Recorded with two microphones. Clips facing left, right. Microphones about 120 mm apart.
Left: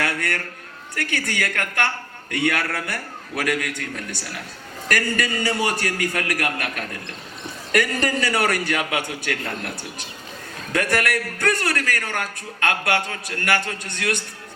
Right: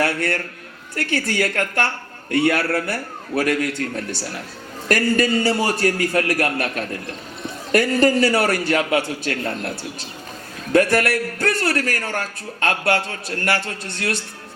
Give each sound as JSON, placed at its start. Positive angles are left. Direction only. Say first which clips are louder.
{"t": 0.0, "sound": "a man's voice", "louder": "right 4 dB", "side_deg": -30}
{"t": 10.7, "sound": "a man's voice", "louder": "right 6 dB", "side_deg": -30}